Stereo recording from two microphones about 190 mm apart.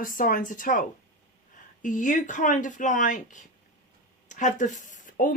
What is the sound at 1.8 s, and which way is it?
Speech, 40° left (ahead or behind).